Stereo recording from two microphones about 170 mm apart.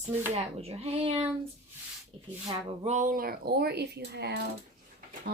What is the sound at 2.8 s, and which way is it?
Speech, 45° right (ahead or behind).